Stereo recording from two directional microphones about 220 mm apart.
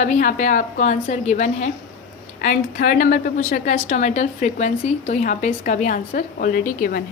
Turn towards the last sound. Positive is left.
turn(degrees=40)  # may be behind; listen again after turning